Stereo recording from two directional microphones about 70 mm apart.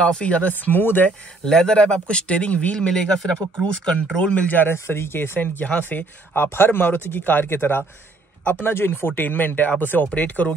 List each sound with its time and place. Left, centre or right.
0.0 s speech: centre
1.4 s speech: centre; by 4.7 s left
4.7 s speech: left